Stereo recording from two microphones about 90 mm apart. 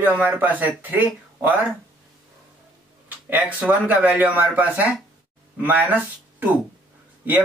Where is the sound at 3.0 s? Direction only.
15° right (ahead or behind).